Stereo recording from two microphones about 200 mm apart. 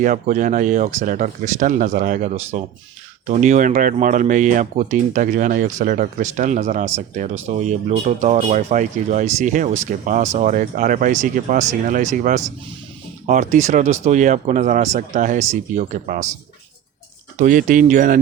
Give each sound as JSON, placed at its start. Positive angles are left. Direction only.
{"t": 0.0, "sound": "speech", "side_deg": -40}
{"t": 17.3, "sound": "speech", "side_deg": -40}